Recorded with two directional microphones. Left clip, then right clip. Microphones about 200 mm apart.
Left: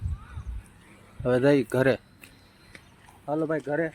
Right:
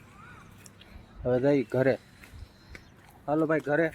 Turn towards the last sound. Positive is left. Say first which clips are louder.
# right 2 dB
turn(degrees=-10)  # may be behind; listen again after turning